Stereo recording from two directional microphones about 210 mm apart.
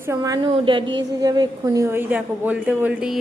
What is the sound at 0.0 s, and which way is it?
A woman's voice, 15° right (ahead or behind).